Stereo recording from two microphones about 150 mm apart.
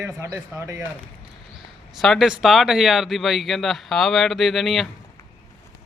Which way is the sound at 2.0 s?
Centre (ahead or behind).